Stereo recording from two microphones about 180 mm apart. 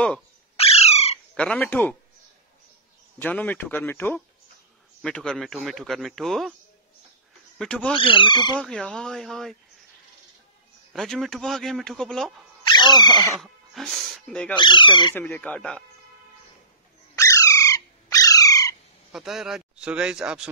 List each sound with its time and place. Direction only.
0.6 s squawk: 35° left (ahead or behind)
1.3 s speech: 5° left (ahead or behind)
3.2 s a man's voice: 10° left (ahead or behind)
7.5 s a man's voice: 5° left (ahead or behind)
7.9 s speech: 30° left (ahead or behind)
8.5 s a man's voice: 5° left (ahead or behind)
10.9 s a man's voice: centre (ahead or behind)
12.6 s speech: 25° left (ahead or behind)
13.4 s speech: centre (ahead or behind)
14.5 s speech: 25° left (ahead or behind)
15.1 s speech: 10° left (ahead or behind)
17.1 s squawk: 15° left (ahead or behind)
19.1 s a man's voice: centre (ahead or behind)